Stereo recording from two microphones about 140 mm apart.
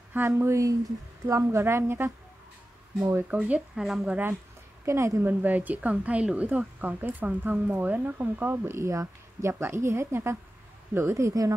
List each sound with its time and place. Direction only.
0.1 s a woman's voice: 15° right (ahead or behind)
4.8 s a woman's voice: 20° right (ahead or behind)